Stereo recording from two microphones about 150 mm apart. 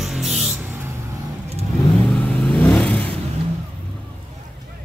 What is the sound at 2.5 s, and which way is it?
Vehicle, centre (ahead or behind).